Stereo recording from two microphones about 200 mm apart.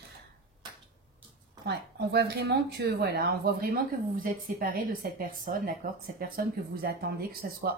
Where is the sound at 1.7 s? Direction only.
55° right (ahead or behind).